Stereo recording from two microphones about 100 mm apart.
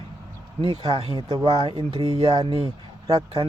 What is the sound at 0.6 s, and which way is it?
Speech, 70° right (ahead or behind).